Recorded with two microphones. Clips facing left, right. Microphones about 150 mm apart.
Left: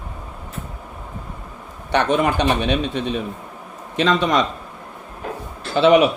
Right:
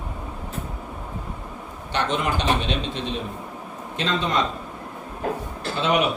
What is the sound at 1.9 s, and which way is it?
Speech, 60° left (ahead or behind).